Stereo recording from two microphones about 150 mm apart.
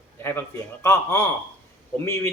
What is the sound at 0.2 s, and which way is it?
Speech, 15° left (ahead or behind).